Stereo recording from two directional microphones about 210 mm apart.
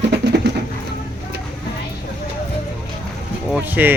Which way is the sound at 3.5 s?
10° right (ahead or behind).